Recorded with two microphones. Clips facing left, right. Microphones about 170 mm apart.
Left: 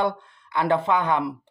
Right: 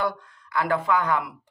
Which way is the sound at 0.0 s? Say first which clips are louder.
Left 3 dB; 25° left (ahead or behind).